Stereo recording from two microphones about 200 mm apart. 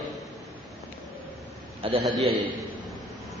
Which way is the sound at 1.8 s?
30° right (ahead or behind).